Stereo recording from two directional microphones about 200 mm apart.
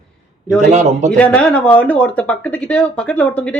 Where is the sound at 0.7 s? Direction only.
35° right (ahead or behind).